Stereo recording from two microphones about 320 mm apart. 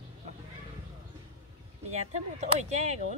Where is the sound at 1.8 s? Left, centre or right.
Right.